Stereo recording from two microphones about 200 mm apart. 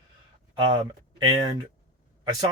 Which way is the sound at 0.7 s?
20° right (ahead or behind).